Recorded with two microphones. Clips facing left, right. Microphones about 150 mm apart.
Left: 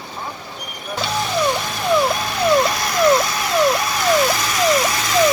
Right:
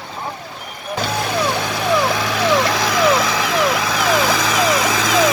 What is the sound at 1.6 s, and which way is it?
Vehicle, 90° right.